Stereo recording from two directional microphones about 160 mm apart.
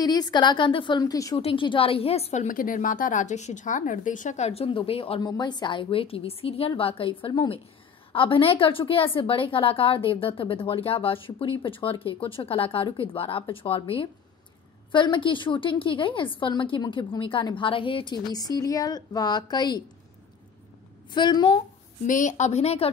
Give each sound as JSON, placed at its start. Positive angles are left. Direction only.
{"t": 0.0, "sound": "a woman's voice", "side_deg": 25}
{"t": 2.4, "sound": "a woman's voice", "side_deg": 55}
{"t": 21.1, "sound": "a woman's voice", "side_deg": 30}
{"t": 22.0, "sound": "speech", "side_deg": 50}